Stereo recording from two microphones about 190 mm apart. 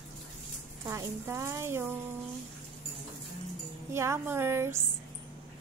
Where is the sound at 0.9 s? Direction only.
15° right (ahead or behind).